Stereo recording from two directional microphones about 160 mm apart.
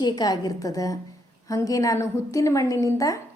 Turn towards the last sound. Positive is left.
turn(degrees=20)  # may be behind; listen again after turning